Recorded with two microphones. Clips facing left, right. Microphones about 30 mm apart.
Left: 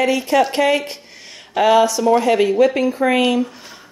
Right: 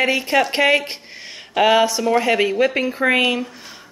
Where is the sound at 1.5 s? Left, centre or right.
Centre.